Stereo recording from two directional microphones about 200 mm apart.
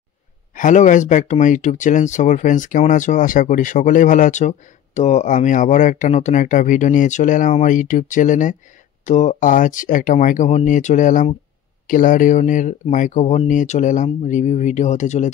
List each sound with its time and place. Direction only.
0.6 s speech: 40° left (ahead or behind)